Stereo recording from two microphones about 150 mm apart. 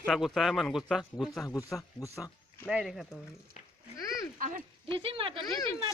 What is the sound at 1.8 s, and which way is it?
Speech, 20° left (ahead or behind).